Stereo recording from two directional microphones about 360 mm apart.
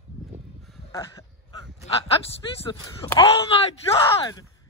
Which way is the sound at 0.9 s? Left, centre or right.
Centre.